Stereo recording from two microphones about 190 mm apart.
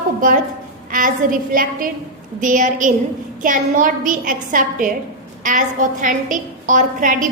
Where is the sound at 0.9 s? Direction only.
45° right (ahead or behind).